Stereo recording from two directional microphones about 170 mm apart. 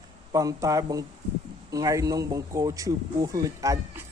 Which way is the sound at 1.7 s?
20° right (ahead or behind).